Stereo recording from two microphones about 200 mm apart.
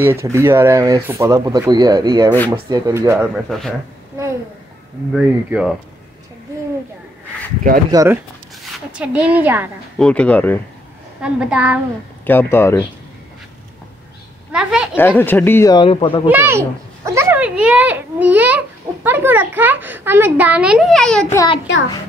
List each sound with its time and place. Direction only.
0.0 s a woman's voice: 10° right (ahead or behind)
3.4 s speech: centre (ahead or behind)
5.1 s speech: 5° right (ahead or behind)
7.9 s a woman's voice: 15° right (ahead or behind)
9.9 s speech: 5° left (ahead or behind)
11.1 s speech: 5° right (ahead or behind)
12.3 s speech: 10° left (ahead or behind)
14.5 s a woman's voice: 5° right (ahead or behind)
15.0 s speech: 10° left (ahead or behind)
16.3 s a sound: 10° right (ahead or behind)
19.0 s a woman's voice: 10° right (ahead or behind)